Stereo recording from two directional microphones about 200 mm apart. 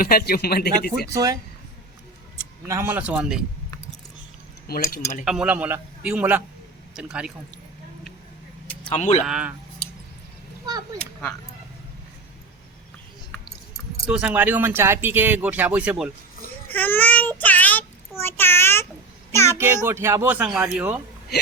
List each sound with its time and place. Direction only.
0.0 s speech: 50° left (ahead or behind)
1.1 s speech: 20° right (ahead or behind)
2.6 s speech: 10° right (ahead or behind)
4.7 s speech: 50° left (ahead or behind)
5.2 s speech: 5° right (ahead or behind)
8.9 s speech: 35° left (ahead or behind)
9.2 s speech: 5° right (ahead or behind)
10.9 s speech: 5° left (ahead or behind)
14.1 s speech: 5° right (ahead or behind)
16.6 s speech: 10° left (ahead or behind)
18.2 s child singing: 10° left (ahead or behind)
19.3 s a child's voice: 15° left (ahead or behind)
19.5 s speech: 10° right (ahead or behind)